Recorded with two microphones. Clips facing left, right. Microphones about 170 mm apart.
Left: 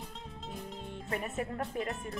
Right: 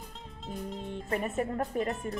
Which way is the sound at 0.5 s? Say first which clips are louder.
Right 6 dB; centre (ahead or behind).